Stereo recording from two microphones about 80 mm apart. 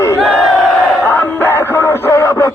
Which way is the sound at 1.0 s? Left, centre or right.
Left.